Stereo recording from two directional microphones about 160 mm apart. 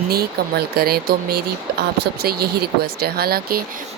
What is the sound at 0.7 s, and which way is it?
Speech, 75° right (ahead or behind).